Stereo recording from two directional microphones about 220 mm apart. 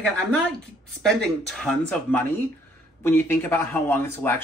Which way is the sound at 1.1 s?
5° left (ahead or behind).